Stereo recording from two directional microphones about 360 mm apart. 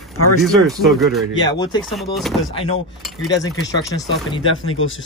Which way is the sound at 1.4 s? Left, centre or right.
Centre.